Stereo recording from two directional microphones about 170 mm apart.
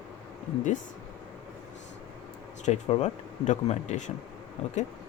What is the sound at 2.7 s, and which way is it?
Speech, 35° left (ahead or behind).